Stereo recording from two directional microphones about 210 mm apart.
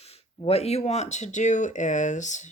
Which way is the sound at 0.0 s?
30° left (ahead or behind).